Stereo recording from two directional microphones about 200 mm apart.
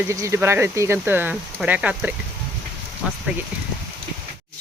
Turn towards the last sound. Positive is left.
turn(degrees=-5)  # may be behind; listen again after turning